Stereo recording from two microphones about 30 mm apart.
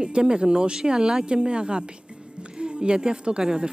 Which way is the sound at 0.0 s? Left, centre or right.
Right.